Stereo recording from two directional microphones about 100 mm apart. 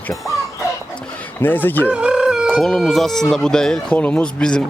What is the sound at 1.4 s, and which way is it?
Speech, 20° left (ahead or behind).